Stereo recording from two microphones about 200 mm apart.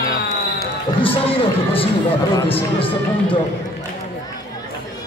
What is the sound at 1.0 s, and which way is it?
A man's voice, 25° left (ahead or behind).